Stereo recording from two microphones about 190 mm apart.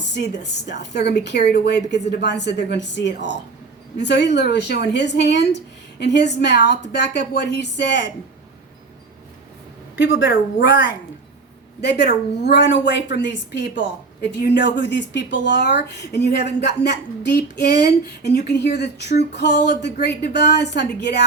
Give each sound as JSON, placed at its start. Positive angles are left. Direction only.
{"t": 0.8, "sound": "a woman's voice", "side_deg": 60}
{"t": 10.0, "sound": "speech", "side_deg": 80}
{"t": 10.2, "sound": "speech", "side_deg": 70}
{"t": 11.8, "sound": "a woman's voice", "side_deg": 60}